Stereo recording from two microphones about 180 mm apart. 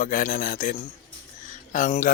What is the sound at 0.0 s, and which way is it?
Speech, 50° left (ahead or behind).